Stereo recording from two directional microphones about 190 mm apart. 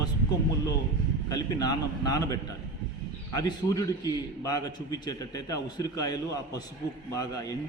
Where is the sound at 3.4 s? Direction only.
20° left (ahead or behind).